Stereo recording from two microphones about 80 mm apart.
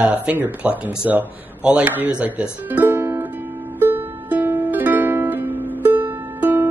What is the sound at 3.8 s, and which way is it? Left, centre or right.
Music, right.